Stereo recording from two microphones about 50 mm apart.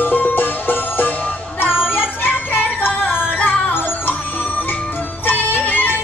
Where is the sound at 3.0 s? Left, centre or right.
Left.